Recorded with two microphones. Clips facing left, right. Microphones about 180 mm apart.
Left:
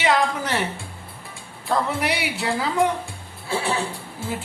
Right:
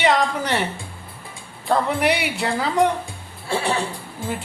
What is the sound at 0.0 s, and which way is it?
Music, centre (ahead or behind).